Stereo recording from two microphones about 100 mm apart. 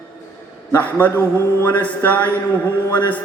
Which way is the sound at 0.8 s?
15° left (ahead or behind).